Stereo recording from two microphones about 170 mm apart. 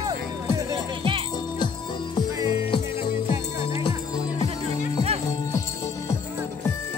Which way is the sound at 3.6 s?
30° left (ahead or behind).